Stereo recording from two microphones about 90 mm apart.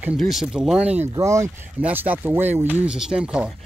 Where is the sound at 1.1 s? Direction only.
35° right (ahead or behind).